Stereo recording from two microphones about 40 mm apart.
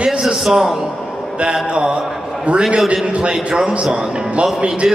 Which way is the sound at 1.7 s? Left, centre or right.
Right.